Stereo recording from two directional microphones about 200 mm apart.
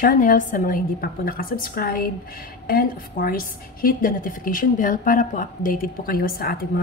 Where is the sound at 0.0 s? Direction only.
45° left (ahead or behind).